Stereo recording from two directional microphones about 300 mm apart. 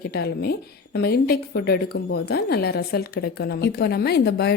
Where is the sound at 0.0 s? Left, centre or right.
Left.